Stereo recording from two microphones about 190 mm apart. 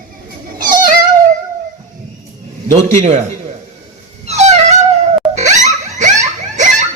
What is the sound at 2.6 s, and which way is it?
Speech, 40° right (ahead or behind).